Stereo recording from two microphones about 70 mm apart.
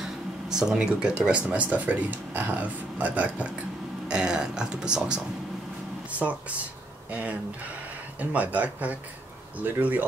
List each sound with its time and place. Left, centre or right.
0.0 s speech: centre; by 10.0 s right